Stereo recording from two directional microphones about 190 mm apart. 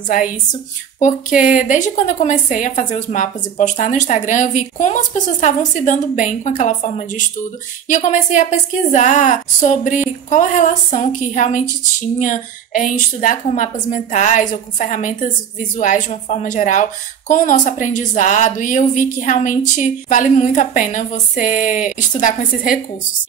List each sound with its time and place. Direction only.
0.9 s a woman's voice: 45° left (ahead or behind)